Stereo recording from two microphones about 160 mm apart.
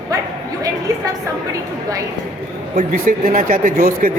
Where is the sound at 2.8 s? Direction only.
50° right (ahead or behind).